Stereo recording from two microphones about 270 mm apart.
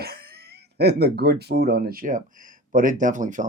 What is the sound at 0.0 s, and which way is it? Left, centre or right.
Speech, right.